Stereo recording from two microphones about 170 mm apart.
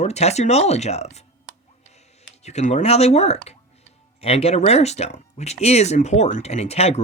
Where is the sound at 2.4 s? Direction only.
40° left (ahead or behind).